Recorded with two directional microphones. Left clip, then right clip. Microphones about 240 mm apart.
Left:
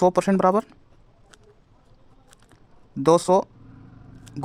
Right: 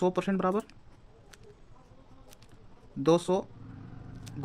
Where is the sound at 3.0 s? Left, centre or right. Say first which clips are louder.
Left 8 dB; left.